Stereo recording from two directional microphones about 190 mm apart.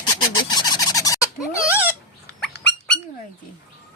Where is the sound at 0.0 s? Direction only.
20° left (ahead or behind).